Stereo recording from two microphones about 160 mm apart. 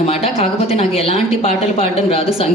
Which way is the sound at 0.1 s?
40° left (ahead or behind).